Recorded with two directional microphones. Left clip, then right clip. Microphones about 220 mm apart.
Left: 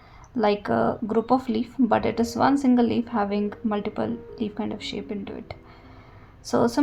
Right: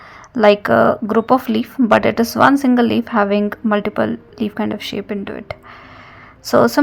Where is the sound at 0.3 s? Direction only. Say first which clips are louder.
Right 11 dB; 30° right (ahead or behind).